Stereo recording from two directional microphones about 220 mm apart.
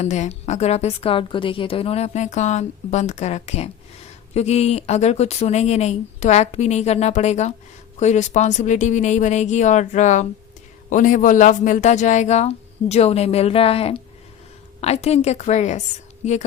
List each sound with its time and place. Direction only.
0.0 s a woman's voice: 30° left (ahead or behind)